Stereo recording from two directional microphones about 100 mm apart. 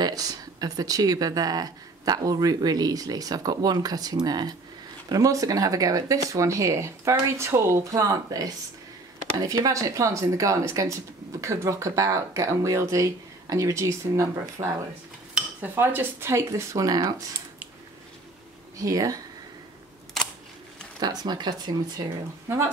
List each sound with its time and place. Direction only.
0.0 s speech: 40° right (ahead or behind)
15.6 s speech: 20° right (ahead or behind); by 17.1 s 35° right (ahead or behind)
18.8 s speech: 35° right (ahead or behind)
21.0 s speech: 40° right (ahead or behind)